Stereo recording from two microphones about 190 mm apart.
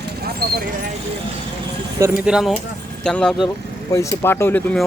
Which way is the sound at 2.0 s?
10° right (ahead or behind).